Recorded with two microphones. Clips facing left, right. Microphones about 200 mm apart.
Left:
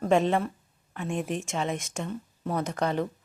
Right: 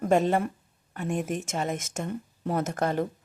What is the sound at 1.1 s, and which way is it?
Speech, 40° right (ahead or behind).